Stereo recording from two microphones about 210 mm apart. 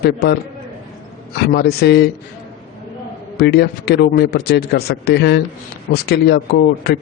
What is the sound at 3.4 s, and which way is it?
Speech, 50° left (ahead or behind).